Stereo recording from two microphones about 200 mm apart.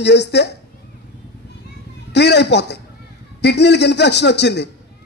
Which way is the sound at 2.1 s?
60° left (ahead or behind).